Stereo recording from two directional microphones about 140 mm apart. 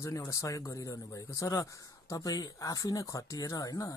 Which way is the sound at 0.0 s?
20° left (ahead or behind).